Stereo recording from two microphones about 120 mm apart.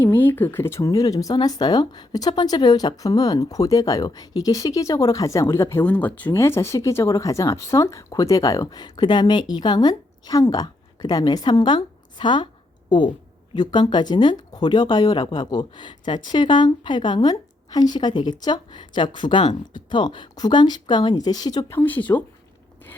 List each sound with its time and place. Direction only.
0.0 s a woman's voice: 15° left (ahead or behind); by 21.6 s 30° left (ahead or behind)
21.7 s speech: 15° left (ahead or behind)